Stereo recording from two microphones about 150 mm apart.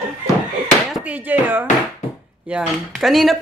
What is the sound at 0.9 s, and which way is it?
Speech, 10° right (ahead or behind).